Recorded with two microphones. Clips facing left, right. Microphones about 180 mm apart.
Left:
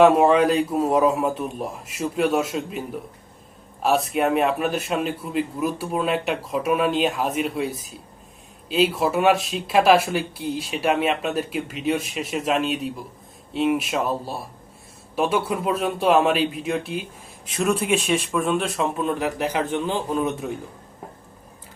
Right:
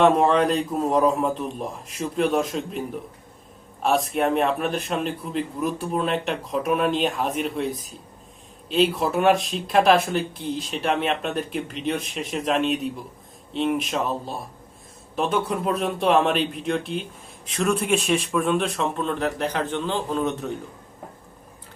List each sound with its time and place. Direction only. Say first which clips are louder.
0.0 s speech: left 3 dB; 5° left (ahead or behind)
3.8 s speech: left 1 dB; centre (ahead or behind)
8.7 s speech: left 1 dB; centre (ahead or behind)